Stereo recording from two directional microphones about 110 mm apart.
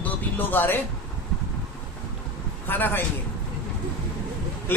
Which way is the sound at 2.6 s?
20° left (ahead or behind).